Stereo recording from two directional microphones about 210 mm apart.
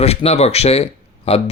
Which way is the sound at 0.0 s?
30° left (ahead or behind).